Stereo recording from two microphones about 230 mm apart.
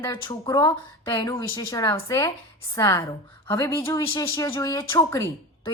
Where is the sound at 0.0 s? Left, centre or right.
Centre.